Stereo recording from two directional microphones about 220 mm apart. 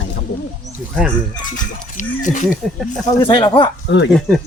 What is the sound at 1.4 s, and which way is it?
Speech, 35° left (ahead or behind).